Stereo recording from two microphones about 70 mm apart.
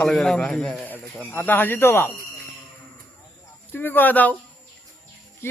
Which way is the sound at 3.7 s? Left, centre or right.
Left.